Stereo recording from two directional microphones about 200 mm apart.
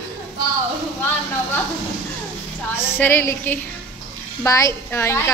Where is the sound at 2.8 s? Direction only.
10° left (ahead or behind).